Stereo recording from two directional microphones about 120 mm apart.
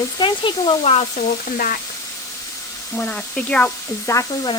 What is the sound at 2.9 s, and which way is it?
Speech, 10° left (ahead or behind).